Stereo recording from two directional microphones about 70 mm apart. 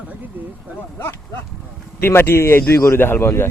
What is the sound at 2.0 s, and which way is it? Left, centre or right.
A man's voice, left.